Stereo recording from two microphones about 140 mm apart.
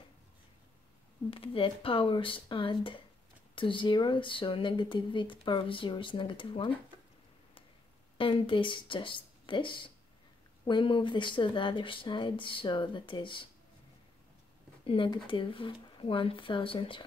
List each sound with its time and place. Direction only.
1.3 s speech: 40° left (ahead or behind)
8.2 s speech: 40° left (ahead or behind)
14.9 s speech: 35° left (ahead or behind)